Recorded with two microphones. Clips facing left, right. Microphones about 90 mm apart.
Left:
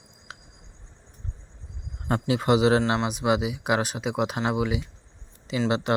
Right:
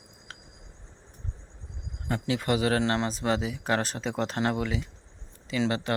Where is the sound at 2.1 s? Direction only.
25° left (ahead or behind).